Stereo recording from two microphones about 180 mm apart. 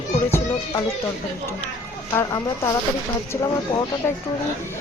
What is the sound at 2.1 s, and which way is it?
Speech, 15° left (ahead or behind).